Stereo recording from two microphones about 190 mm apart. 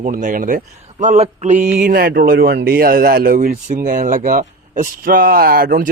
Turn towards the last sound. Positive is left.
turn(degrees=-50)  # may be behind; listen again after turning